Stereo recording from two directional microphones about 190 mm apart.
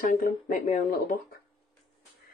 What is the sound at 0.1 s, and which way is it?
A woman's voice, 45° left (ahead or behind).